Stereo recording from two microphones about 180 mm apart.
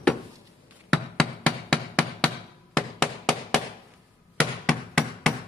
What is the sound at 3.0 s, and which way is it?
Hammer, centre (ahead or behind).